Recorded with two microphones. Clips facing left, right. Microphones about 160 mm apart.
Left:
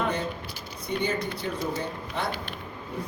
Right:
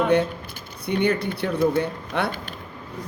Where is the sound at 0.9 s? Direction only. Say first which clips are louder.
Right 6 dB; 65° right (ahead or behind).